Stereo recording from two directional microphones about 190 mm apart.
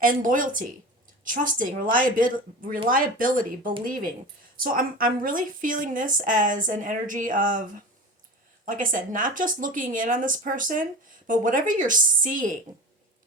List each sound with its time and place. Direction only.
0.0 s speech: 45° right (ahead or behind)
8.6 s speech: 45° right (ahead or behind)